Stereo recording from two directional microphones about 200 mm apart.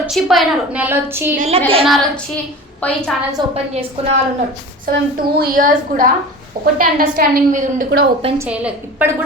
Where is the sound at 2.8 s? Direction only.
5° left (ahead or behind).